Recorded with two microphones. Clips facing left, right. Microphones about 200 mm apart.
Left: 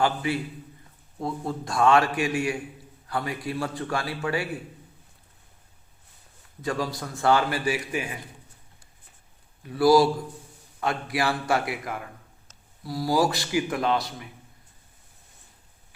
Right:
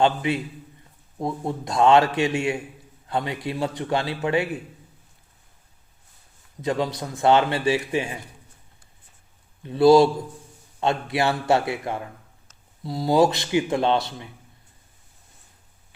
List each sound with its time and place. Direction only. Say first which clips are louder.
0.0 s a man's voice: right 4 dB; 20° right (ahead or behind)
6.6 s a man's voice: right 4 dB; 20° right (ahead or behind)
9.6 s a man's voice: right 4 dB; 25° right (ahead or behind)